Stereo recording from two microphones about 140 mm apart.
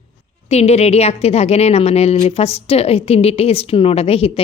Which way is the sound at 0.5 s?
50° left (ahead or behind).